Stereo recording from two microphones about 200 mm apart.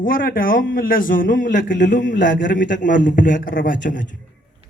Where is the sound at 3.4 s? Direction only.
45° left (ahead or behind).